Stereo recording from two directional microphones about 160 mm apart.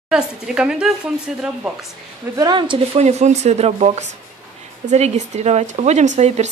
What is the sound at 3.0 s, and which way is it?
Speech, 45° right (ahead or behind).